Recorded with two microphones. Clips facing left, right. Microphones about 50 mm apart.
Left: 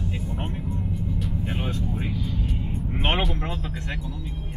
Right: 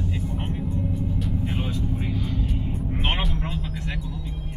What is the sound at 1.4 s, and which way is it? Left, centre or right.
Music, centre.